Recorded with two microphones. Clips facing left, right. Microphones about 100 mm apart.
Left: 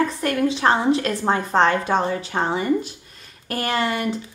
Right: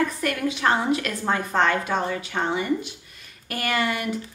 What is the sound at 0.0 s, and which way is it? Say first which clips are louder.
A woman's voice: left 4 dB; 30° left (ahead or behind).